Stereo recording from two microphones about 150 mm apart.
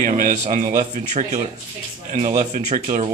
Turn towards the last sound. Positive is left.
turn(degrees=-55)  # may be behind; listen again after turning